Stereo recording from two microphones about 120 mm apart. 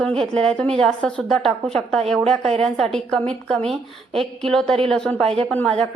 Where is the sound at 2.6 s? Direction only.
5° left (ahead or behind).